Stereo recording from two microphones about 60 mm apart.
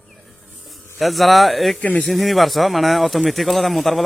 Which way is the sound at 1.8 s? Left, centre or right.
Left.